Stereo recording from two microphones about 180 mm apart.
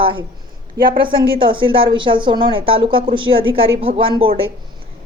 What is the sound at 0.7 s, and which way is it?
Speech, 55° right (ahead or behind).